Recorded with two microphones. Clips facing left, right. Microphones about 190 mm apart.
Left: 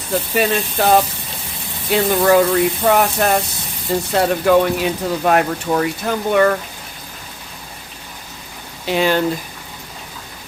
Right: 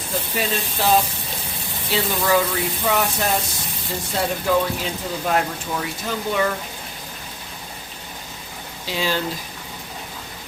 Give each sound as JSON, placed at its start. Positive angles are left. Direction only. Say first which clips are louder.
{"t": 0.3, "sound": "speech", "louder": "left 8 dB", "side_deg": 60}
{"t": 8.9, "sound": "speech", "louder": "left 8 dB", "side_deg": 60}